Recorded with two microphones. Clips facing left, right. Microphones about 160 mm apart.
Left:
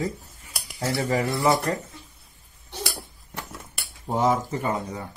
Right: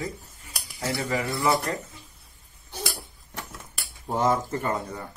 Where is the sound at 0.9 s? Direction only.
35° left (ahead or behind).